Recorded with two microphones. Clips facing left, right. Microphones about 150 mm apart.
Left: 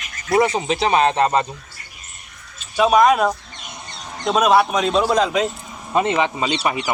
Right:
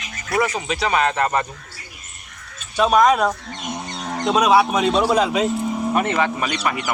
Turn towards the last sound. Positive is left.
turn(degrees=20)  # may be behind; listen again after turning